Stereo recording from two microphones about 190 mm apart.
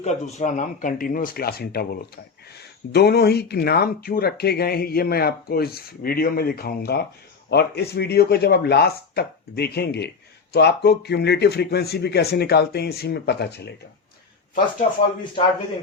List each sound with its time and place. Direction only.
0.0 s speech: 40° left (ahead or behind); by 13.7 s 60° left (ahead or behind)